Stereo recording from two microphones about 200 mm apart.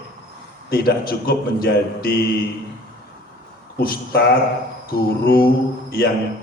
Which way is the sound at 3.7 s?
50° left (ahead or behind).